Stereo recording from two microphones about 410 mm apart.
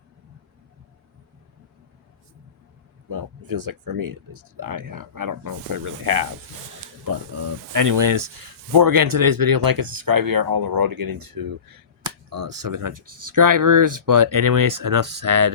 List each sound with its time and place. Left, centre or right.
3.1 s speech: right
7.7 s speech: right